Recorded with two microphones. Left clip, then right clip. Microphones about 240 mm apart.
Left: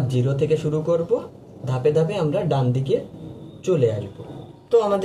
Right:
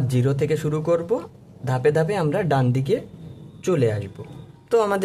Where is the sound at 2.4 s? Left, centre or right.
Right.